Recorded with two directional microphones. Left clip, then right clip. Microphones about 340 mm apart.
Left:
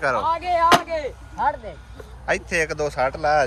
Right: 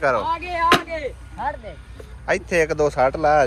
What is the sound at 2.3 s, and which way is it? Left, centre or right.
Speech, centre.